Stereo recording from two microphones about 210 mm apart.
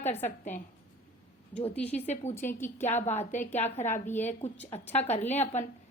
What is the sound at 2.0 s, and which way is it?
Speech, 35° left (ahead or behind).